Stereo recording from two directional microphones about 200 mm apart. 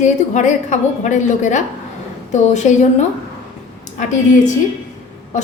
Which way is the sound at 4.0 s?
40° left (ahead or behind).